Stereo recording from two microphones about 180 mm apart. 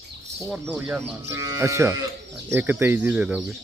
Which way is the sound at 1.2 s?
15° right (ahead or behind).